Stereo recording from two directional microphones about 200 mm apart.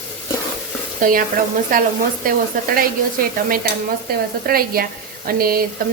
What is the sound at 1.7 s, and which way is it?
Speech, 40° right (ahead or behind).